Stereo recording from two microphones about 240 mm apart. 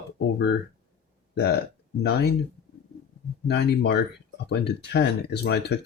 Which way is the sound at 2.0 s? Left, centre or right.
Left.